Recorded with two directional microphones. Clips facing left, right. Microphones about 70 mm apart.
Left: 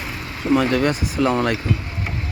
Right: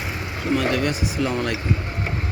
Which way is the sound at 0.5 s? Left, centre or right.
Left.